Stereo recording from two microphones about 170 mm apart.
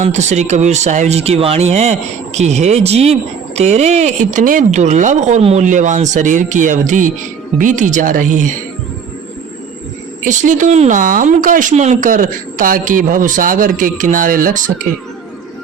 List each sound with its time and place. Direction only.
0.0 s speech: 40° right (ahead or behind)
10.2 s speech: 50° right (ahead or behind)